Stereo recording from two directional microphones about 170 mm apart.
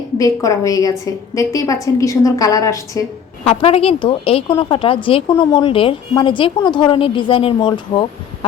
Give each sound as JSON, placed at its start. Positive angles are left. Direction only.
{"t": 0.2, "sound": "a woman's voice", "side_deg": 20}
{"t": 3.4, "sound": "a woman's voice", "side_deg": 35}